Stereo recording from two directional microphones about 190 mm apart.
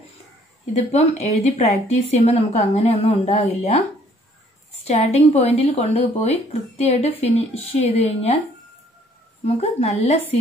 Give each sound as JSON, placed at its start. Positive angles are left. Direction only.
{"t": 0.9, "sound": "speech", "side_deg": 35}
{"t": 4.8, "sound": "speech", "side_deg": 35}
{"t": 9.6, "sound": "speech", "side_deg": 35}